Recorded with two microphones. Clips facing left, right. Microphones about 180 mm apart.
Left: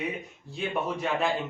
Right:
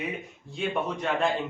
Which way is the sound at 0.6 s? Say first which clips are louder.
Right 1 dB; 5° left (ahead or behind).